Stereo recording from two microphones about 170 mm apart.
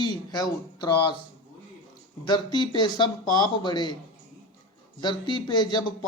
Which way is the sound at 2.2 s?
25° left (ahead or behind).